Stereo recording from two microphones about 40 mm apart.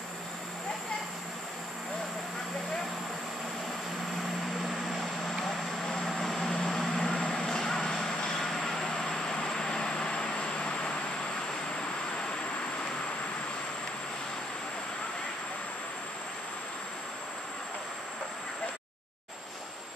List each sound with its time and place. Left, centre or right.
5.4 s vehicle: centre
6.0 s vehicle: centre; by 11.0 s left